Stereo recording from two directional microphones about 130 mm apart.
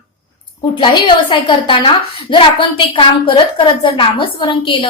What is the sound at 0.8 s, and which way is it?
A woman's voice, 35° left (ahead or behind).